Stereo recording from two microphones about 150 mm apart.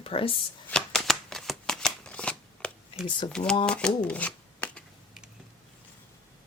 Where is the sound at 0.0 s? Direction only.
40° left (ahead or behind).